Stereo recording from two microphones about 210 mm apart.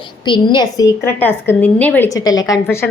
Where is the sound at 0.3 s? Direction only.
20° left (ahead or behind).